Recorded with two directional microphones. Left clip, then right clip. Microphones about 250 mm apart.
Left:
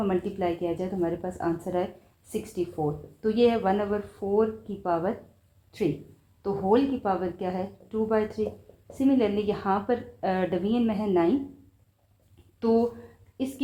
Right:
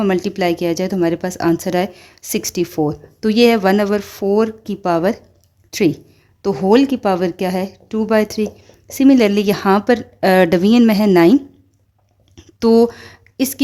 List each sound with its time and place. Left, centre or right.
0.0 s speech: right
12.5 s speech: right